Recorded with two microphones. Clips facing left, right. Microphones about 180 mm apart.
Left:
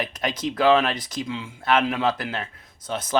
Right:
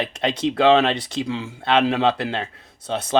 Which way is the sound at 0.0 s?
25° right (ahead or behind).